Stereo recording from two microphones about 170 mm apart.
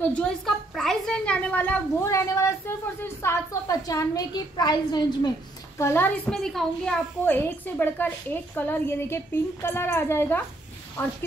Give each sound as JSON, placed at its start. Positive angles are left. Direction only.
{"t": 0.0, "sound": "a woman's voice", "side_deg": 5}
{"t": 5.8, "sound": "a woman's voice", "side_deg": 15}